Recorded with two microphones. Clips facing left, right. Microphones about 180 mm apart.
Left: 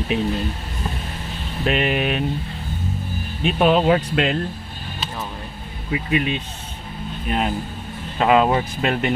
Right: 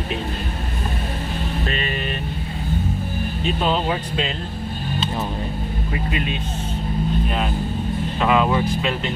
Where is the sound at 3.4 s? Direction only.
65° left (ahead or behind).